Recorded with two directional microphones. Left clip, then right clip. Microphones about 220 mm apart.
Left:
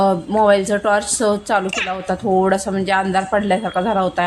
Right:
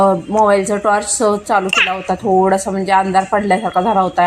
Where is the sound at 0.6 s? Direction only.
5° left (ahead or behind).